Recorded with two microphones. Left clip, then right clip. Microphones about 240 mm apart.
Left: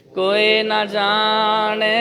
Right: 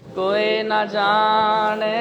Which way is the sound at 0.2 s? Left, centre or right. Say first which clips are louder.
Left 4 dB; left.